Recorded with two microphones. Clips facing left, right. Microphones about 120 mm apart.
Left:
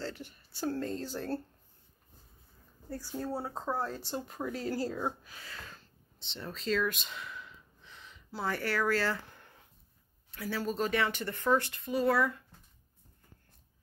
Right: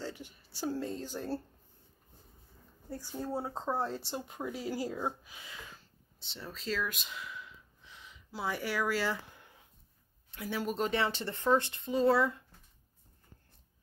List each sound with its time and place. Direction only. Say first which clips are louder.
0.0 s speech: left 2 dB; 15° right (ahead or behind)
3.3 s speech: right 2 dB; 15° right (ahead or behind)